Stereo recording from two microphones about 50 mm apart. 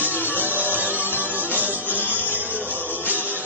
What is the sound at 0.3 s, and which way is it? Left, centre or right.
Music, right.